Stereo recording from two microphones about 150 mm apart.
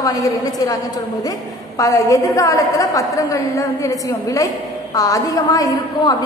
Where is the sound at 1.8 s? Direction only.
20° left (ahead or behind).